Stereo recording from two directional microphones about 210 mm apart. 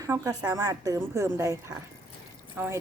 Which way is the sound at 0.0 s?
15° right (ahead or behind).